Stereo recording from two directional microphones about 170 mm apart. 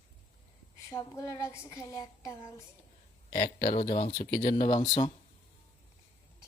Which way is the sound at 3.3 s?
65° left (ahead or behind).